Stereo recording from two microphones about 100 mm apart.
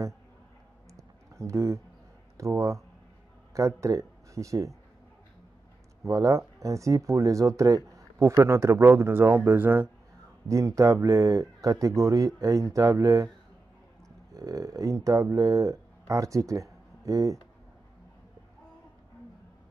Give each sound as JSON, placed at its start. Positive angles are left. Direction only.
{"t": 0.9, "sound": "a sound", "side_deg": -30}
{"t": 2.3, "sound": "speech", "side_deg": -30}
{"t": 6.0, "sound": "speech", "side_deg": -35}
{"t": 10.5, "sound": "speech", "side_deg": -30}
{"t": 14.3, "sound": "speech", "side_deg": -35}